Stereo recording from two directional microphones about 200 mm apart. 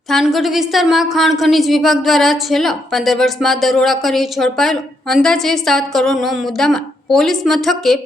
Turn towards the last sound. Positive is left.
turn(degrees=0)  # may be behind; listen again after turning